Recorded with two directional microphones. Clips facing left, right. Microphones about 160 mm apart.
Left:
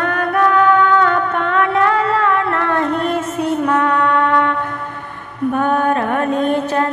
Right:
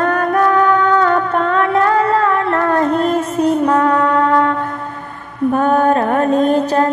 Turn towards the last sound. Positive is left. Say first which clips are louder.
# right 3 dB
turn(degrees=-35)  # may be behind; listen again after turning